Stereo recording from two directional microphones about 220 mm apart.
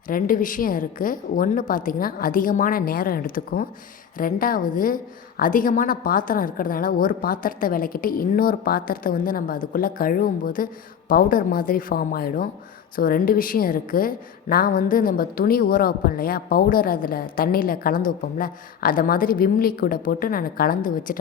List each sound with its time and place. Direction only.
0.1 s a woman's voice: 40° left (ahead or behind)